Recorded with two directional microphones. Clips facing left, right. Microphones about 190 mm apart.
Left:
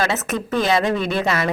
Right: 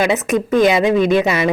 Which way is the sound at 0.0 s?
15° right (ahead or behind).